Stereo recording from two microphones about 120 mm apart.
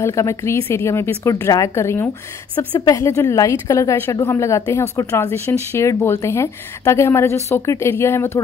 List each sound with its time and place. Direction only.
0.0 s speech: 25° left (ahead or behind)